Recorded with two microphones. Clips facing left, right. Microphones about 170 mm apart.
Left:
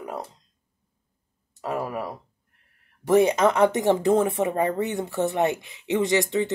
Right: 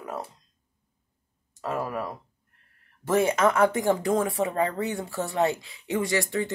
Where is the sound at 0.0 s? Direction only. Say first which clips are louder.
Left 1 dB; 15° left (ahead or behind).